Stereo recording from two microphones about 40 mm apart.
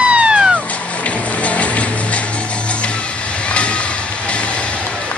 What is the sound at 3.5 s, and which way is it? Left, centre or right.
Music, left.